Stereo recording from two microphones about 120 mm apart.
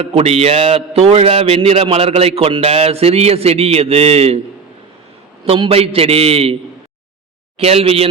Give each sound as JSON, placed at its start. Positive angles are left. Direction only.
{"t": 0.0, "sound": "a man's voice", "side_deg": -55}
{"t": 5.5, "sound": "a man's voice", "side_deg": -50}
{"t": 7.6, "sound": "a man's voice", "side_deg": -55}